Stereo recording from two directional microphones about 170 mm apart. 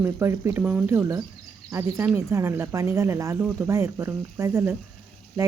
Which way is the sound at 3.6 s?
15° right (ahead or behind).